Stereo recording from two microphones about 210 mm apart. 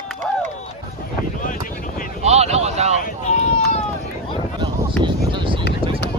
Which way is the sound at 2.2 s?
30° right (ahead or behind).